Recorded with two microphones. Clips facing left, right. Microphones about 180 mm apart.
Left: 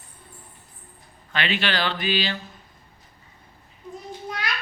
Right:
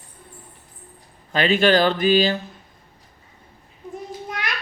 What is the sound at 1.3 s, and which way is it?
Speech, 40° right (ahead or behind).